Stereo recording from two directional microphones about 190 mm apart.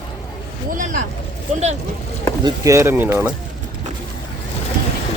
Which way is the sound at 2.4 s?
20° right (ahead or behind).